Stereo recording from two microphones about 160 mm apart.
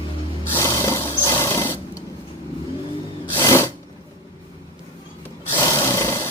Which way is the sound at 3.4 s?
15° left (ahead or behind).